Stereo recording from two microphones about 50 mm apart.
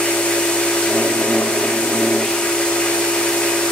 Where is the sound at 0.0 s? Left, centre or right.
Centre.